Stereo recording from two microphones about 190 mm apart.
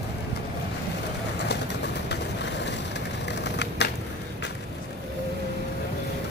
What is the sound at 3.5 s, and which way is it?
Typewriter, 65° left (ahead or behind).